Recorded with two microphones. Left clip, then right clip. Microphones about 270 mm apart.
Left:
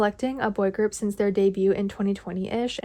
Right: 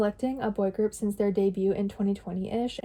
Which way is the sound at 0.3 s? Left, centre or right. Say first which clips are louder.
Left 4 dB; left.